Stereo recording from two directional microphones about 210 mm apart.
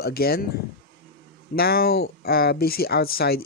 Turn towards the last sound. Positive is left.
turn(degrees=45)  # may be behind; listen again after turning